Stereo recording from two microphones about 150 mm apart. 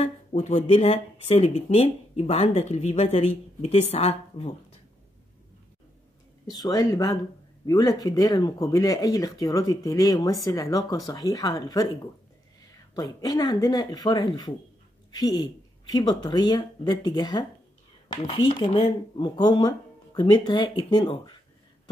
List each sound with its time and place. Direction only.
0.0 s speech: 45° left (ahead or behind)
6.5 s speech: 25° left (ahead or behind)
12.9 s speech: 25° left (ahead or behind)